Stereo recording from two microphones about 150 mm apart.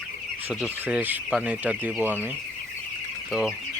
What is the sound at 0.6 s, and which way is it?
Speech, 5° right (ahead or behind).